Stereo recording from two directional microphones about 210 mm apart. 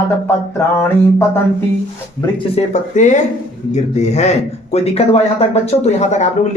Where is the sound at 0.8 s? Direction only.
10° left (ahead or behind).